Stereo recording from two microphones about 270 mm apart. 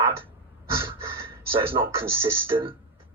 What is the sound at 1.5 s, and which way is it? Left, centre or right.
Speech, centre.